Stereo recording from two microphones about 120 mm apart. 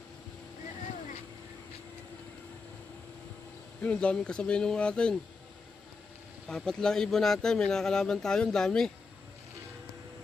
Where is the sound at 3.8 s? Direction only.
10° left (ahead or behind).